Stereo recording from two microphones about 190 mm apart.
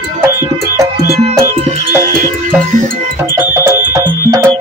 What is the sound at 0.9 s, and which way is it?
Music, 55° right (ahead or behind).